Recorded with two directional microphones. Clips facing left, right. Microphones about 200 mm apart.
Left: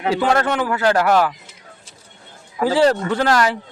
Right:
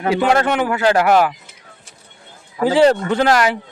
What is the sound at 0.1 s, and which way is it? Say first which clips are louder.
Speech: right 2 dB; 15° right (ahead or behind).